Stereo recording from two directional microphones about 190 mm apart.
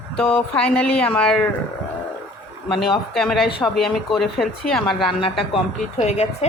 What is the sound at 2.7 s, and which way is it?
Speech, centre (ahead or behind).